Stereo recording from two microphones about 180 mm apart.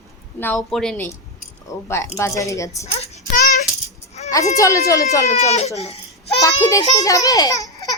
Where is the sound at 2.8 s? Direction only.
35° left (ahead or behind).